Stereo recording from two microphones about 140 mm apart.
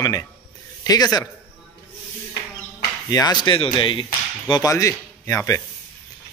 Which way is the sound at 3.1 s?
25° left (ahead or behind).